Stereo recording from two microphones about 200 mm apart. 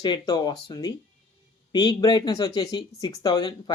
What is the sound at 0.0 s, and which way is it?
Speech, 20° left (ahead or behind).